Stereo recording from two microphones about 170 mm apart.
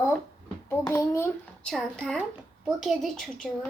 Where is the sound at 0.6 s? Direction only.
15° left (ahead or behind).